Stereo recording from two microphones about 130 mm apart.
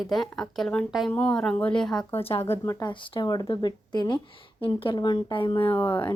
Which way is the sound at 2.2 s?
50° left (ahead or behind).